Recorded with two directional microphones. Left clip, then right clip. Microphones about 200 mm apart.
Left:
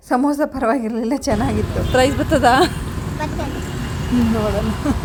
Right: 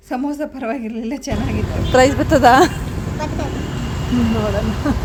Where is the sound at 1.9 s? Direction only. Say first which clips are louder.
Right 3 dB; 10° right (ahead or behind).